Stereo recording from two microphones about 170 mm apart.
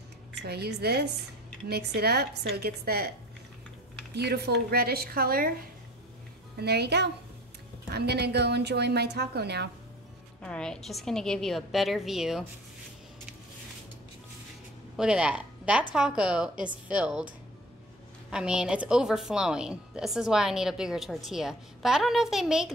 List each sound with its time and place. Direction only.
0.4 s a woman's voice: 75° right (ahead or behind)
4.1 s speech: 75° right (ahead or behind)
6.6 s a woman's voice: 75° right (ahead or behind)
10.4 s a woman's voice: 5° left (ahead or behind)
15.0 s a woman's voice: 5° right (ahead or behind)
18.3 s a woman's voice: 5° right (ahead or behind)